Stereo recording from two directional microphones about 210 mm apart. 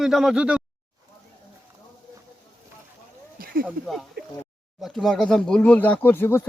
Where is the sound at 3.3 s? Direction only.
45° right (ahead or behind).